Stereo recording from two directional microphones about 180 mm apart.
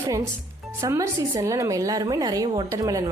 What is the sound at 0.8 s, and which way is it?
A woman's voice, 15° right (ahead or behind).